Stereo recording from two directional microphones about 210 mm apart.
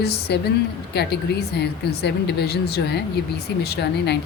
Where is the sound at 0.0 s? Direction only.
50° left (ahead or behind).